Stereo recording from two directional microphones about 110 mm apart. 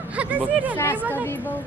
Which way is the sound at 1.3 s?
15° left (ahead or behind).